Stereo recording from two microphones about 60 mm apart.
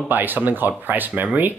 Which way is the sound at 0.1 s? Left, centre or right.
Right.